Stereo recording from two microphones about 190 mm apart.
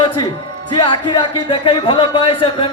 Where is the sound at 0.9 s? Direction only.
25° left (ahead or behind).